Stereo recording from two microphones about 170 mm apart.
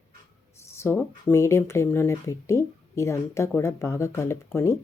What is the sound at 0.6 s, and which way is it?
Speech, 15° left (ahead or behind).